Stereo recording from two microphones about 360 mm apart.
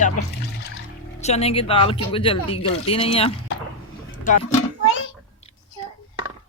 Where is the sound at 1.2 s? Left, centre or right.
Centre.